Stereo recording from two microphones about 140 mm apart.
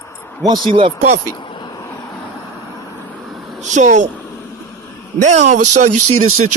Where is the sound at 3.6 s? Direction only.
60° right (ahead or behind).